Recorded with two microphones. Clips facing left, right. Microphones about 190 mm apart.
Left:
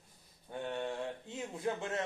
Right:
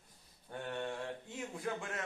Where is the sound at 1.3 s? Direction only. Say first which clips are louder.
Left 4 dB; 25° left (ahead or behind).